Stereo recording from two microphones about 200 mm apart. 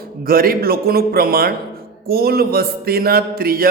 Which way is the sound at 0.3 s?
50° right (ahead or behind).